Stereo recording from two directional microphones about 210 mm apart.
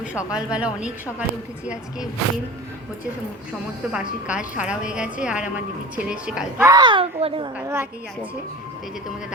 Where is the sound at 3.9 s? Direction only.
5° right (ahead or behind).